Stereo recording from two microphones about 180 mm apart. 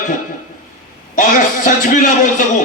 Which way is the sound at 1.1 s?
45° left (ahead or behind).